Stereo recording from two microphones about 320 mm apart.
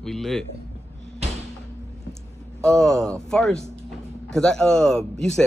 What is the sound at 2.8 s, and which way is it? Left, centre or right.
Speech, centre.